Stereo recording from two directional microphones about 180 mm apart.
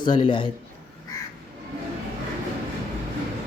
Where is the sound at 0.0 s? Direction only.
25° left (ahead or behind).